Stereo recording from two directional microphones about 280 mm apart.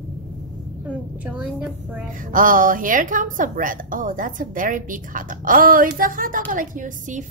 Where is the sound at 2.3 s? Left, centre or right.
Right.